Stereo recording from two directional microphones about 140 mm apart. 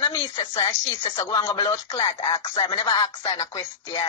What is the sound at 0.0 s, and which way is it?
A woman's voice, 25° left (ahead or behind).